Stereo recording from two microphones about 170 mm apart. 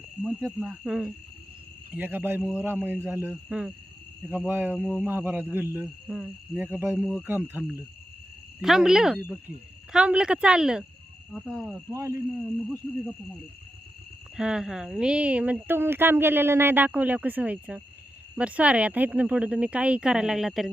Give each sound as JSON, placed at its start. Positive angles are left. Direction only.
{"t": 0.2, "sound": "speech", "side_deg": -5}
{"t": 8.6, "sound": "speech", "side_deg": -5}
{"t": 11.9, "sound": "speech", "side_deg": -20}
{"t": 14.3, "sound": "speech", "side_deg": -5}